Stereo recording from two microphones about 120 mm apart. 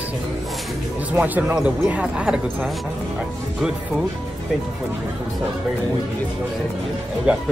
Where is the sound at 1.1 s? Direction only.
15° right (ahead or behind).